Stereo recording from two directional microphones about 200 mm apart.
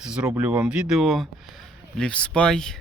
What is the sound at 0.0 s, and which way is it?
Speech, 5° right (ahead or behind).